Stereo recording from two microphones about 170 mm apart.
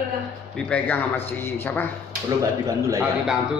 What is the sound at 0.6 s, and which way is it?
A man's voice, 5° left (ahead or behind).